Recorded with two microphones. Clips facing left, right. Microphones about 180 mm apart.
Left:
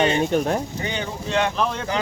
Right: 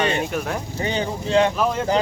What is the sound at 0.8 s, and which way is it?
Speech, 30° right (ahead or behind).